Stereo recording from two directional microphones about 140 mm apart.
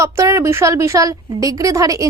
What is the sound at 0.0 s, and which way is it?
A woman's voice, 20° right (ahead or behind).